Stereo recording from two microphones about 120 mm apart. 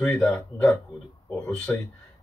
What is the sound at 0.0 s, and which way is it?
Speech, 5° left (ahead or behind).